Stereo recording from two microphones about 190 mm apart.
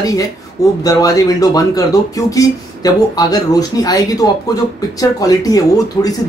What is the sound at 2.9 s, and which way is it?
Speech, 20° left (ahead or behind).